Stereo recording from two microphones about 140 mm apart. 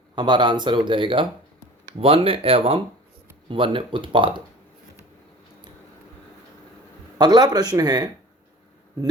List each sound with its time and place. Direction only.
0.2 s speech: 35° right (ahead or behind)
7.2 s speech: 30° right (ahead or behind)